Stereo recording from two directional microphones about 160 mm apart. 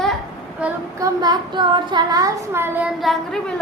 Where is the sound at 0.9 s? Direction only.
20° right (ahead or behind).